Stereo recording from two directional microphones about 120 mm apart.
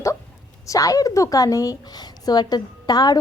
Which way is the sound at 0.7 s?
30° left (ahead or behind).